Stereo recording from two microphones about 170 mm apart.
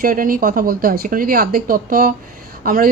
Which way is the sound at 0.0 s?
55° right (ahead or behind).